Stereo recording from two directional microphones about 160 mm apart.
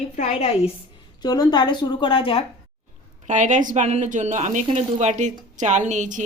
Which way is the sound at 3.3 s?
50° right (ahead or behind).